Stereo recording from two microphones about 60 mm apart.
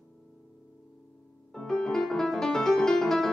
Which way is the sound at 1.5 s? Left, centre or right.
Centre.